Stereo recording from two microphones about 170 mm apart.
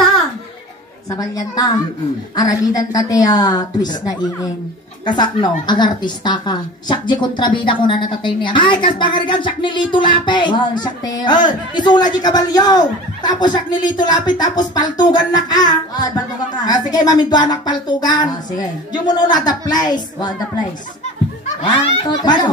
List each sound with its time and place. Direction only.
1.1 s a woman's voice: 20° left (ahead or behind)
21.6 s a woman's voice: 25° left (ahead or behind)